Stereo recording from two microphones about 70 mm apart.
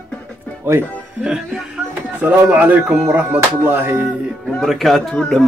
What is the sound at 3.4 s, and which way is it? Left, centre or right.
Music, right.